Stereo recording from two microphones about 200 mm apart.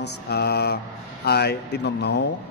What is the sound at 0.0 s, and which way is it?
Speech, 55° left (ahead or behind).